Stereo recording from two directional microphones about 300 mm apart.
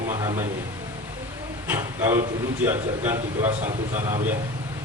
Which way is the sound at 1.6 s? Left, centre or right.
Centre.